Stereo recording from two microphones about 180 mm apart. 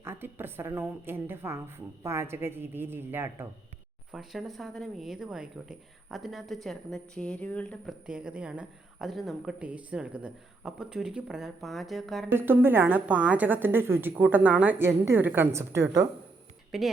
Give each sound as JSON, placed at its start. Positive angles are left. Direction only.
{"t": 0.0, "sound": "a woman's voice", "side_deg": -10}
{"t": 8.0, "sound": "a woman's voice", "side_deg": -5}
{"t": 12.3, "sound": "a woman's voice", "side_deg": -10}
{"t": 16.7, "sound": "a woman's voice", "side_deg": 0}